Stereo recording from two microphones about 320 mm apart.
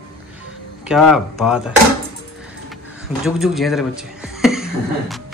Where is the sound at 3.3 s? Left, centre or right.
Centre.